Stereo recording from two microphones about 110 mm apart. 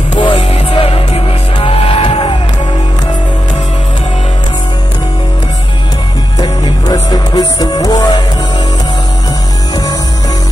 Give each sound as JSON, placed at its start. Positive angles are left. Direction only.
{"t": 0.1, "sound": "music", "side_deg": 50}
{"t": 6.4, "sound": "music", "side_deg": 40}